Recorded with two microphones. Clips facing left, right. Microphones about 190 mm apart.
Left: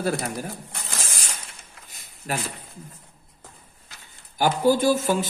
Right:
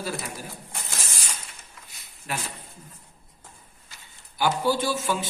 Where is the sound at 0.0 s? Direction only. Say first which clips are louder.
Left 7 dB; 55° left (ahead or behind).